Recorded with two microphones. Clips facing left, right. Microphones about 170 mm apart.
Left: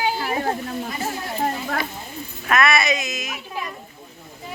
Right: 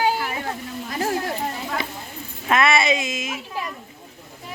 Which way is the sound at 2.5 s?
25° right (ahead or behind).